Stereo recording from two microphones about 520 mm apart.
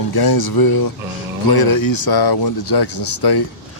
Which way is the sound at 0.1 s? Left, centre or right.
Left.